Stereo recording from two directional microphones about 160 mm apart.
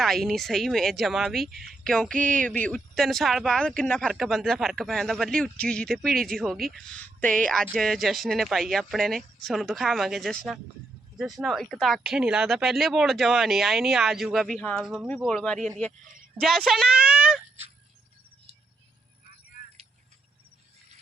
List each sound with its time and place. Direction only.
0.0 s speech: centre (ahead or behind)